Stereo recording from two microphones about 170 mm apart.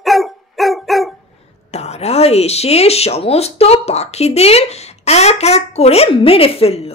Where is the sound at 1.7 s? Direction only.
40° left (ahead or behind).